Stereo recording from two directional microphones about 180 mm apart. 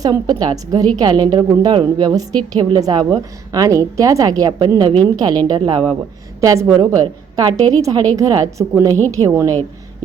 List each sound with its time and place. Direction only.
0.0 s a woman's voice: 20° right (ahead or behind)